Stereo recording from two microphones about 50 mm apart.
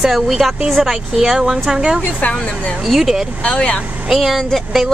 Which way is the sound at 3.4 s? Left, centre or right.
Left.